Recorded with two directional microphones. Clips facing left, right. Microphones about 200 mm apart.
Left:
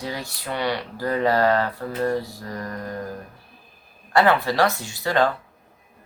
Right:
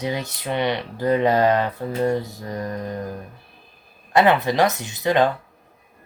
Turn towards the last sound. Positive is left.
turn(degrees=-20)  # may be behind; listen again after turning